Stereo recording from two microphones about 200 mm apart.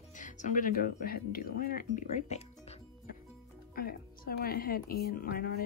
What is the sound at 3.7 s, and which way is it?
Speech, 45° left (ahead or behind).